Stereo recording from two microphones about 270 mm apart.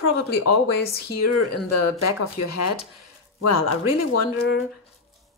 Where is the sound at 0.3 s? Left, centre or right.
Left.